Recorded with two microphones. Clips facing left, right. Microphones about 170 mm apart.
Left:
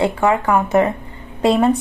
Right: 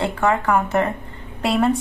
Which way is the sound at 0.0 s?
15° left (ahead or behind).